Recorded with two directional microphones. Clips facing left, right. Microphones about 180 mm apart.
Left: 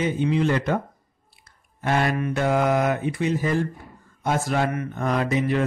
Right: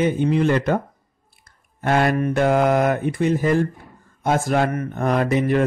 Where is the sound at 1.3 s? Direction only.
50° right (ahead or behind).